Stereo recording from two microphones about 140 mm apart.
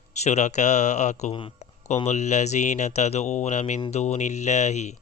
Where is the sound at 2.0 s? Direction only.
55° left (ahead or behind).